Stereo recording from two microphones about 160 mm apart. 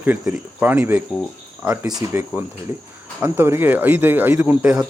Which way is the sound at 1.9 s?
25° right (ahead or behind).